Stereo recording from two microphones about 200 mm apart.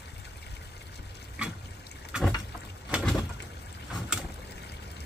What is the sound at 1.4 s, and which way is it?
Water, 5° right (ahead or behind).